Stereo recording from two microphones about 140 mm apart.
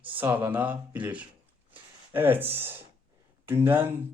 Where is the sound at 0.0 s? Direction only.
15° right (ahead or behind).